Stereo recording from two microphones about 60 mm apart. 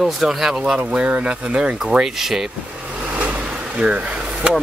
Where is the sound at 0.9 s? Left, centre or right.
Right.